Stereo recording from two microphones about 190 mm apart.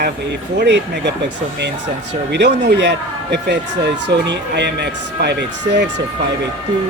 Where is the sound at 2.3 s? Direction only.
65° right (ahead or behind).